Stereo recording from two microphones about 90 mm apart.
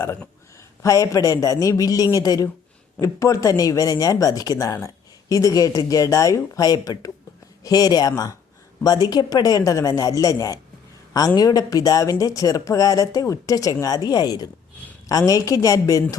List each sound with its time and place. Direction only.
0.8 s speech: 35° left (ahead or behind)